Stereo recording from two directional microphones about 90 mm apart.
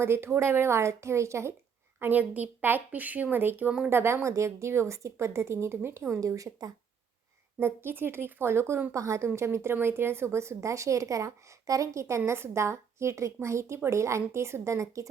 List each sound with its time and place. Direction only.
0.0 s speech: 25° right (ahead or behind)
2.0 s speech: 20° right (ahead or behind)
6.1 s speech: 40° right (ahead or behind)
7.6 s speech: 25° right (ahead or behind)